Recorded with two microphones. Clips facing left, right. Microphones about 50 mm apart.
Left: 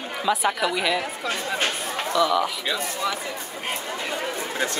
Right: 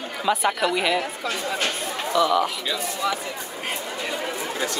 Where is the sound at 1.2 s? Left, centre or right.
Left.